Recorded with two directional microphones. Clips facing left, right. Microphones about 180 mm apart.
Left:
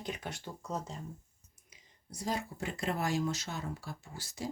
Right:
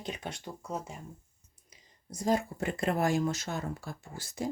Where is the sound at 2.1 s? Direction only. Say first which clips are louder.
Right 7 dB; 45° right (ahead or behind).